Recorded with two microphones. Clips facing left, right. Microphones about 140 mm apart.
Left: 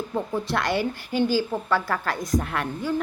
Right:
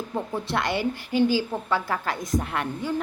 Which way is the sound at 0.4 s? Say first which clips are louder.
Left 1 dB; 20° right (ahead or behind).